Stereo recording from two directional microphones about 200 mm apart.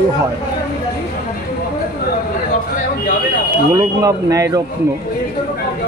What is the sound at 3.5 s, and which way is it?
Speech, 15° right (ahead or behind).